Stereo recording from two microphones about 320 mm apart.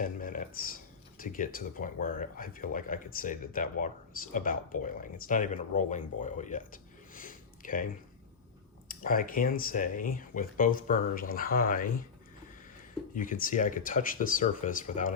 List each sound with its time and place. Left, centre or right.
0.0 s a sound: left
1.2 s speech: left
8.9 s speech: left
13.1 s speech: left